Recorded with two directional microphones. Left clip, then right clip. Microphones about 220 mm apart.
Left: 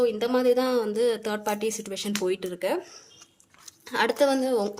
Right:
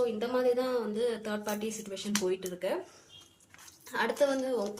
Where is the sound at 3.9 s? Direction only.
50° left (ahead or behind).